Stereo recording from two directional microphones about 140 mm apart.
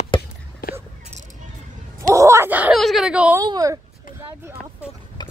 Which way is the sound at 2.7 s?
Centre (ahead or behind).